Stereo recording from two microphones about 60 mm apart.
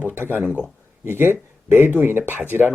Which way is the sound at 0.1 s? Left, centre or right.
Right.